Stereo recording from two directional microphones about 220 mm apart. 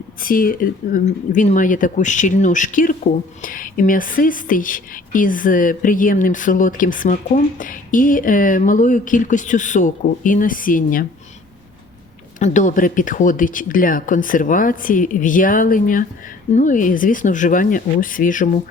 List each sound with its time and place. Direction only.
0.2 s speech: 40° left (ahead or behind)
12.4 s speech: 35° left (ahead or behind)